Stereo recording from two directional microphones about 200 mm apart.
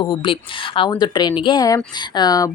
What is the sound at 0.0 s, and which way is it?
Speech, 25° left (ahead or behind).